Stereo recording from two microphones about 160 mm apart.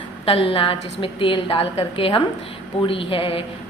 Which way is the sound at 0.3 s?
35° left (ahead or behind).